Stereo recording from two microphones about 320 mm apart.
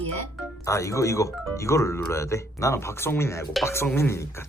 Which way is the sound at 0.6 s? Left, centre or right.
Centre.